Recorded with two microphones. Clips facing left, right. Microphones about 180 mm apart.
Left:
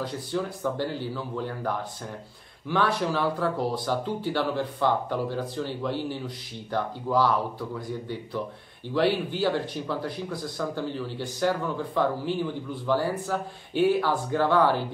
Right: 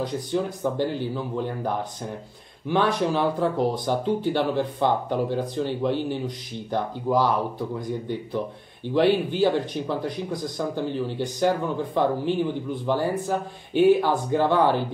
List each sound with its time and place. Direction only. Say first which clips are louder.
0.0 s speech: right 4 dB; 15° right (ahead or behind)
2.7 s speech: right 3 dB; 20° right (ahead or behind)